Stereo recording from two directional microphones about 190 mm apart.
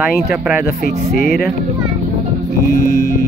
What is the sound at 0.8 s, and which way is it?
Speech, 50° left (ahead or behind).